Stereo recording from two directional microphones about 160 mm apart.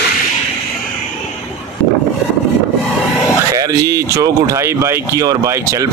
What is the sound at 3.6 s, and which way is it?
A man's voice, 20° right (ahead or behind).